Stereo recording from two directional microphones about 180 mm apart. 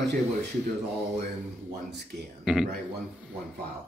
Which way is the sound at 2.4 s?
5° right (ahead or behind).